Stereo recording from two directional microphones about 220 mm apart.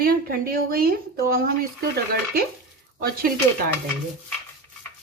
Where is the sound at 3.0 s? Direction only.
40° right (ahead or behind).